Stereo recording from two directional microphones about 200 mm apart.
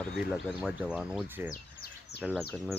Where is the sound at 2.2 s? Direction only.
Centre (ahead or behind).